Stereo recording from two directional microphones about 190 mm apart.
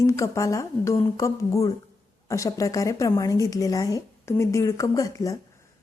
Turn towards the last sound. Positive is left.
turn(degrees=15)  # may be behind; listen again after turning